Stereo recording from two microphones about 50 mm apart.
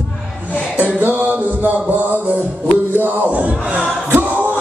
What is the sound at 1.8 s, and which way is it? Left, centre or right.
Speech, right.